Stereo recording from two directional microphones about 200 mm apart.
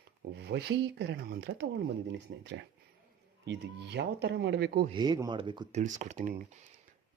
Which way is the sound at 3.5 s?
60° right (ahead or behind).